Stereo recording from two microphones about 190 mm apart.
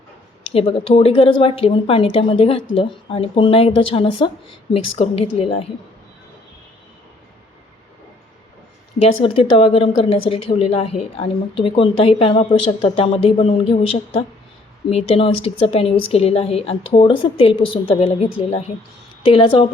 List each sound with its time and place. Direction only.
0.5 s a woman's voice: 30° left (ahead or behind)
9.2 s a woman's voice: 30° left (ahead or behind)